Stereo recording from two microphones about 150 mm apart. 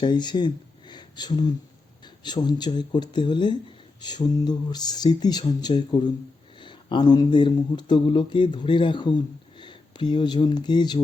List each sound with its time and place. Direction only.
0.0 s speech: 30° left (ahead or behind)